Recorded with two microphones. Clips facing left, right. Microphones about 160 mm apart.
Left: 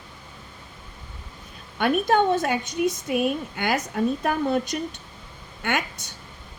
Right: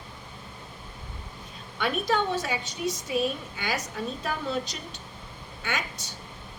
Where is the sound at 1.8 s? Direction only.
50° left (ahead or behind).